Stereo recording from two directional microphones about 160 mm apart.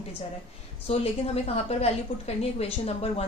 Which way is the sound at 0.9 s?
40° left (ahead or behind).